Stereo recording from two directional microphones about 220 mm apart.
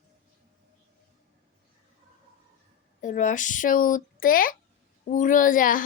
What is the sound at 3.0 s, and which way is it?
Speech, 35° left (ahead or behind).